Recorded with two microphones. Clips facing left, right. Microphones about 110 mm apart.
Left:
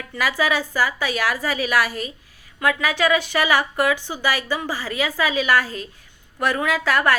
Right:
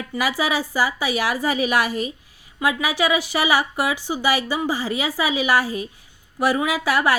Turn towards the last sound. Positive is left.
turn(degrees=-10)  # may be behind; listen again after turning